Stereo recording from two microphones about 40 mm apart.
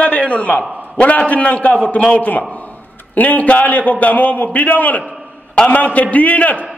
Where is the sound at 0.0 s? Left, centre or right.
Left.